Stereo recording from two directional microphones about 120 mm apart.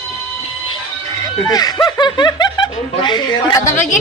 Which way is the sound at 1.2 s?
30° left (ahead or behind).